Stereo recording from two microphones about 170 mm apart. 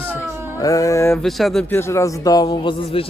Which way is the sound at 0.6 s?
20° left (ahead or behind).